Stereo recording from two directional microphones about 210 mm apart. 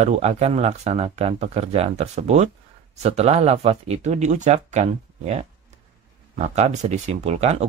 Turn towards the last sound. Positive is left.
turn(degrees=-30)  # may be behind; listen again after turning